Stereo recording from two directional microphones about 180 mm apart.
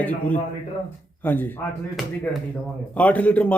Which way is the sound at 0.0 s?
10° left (ahead or behind).